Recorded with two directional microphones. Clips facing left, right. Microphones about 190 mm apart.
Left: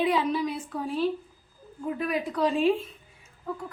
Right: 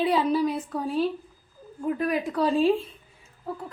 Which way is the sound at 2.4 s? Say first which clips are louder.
Right 2 dB; 35° right (ahead or behind).